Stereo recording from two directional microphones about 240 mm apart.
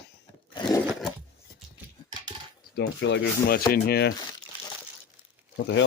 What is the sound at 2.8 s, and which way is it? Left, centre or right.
Speech, left.